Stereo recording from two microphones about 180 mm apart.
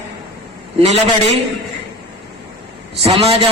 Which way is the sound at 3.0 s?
35° right (ahead or behind).